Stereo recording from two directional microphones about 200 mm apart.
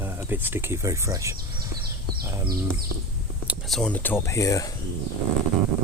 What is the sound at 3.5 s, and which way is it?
Speech, centre (ahead or behind).